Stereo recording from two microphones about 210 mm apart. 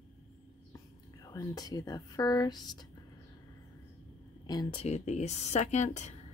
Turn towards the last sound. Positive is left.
turn(degrees=35)  # may be behind; listen again after turning